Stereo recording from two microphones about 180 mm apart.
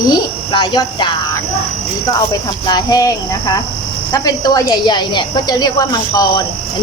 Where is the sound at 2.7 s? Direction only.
20° left (ahead or behind).